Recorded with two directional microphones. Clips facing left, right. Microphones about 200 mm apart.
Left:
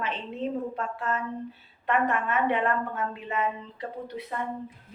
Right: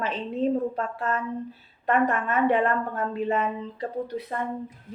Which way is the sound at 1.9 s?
40° right (ahead or behind).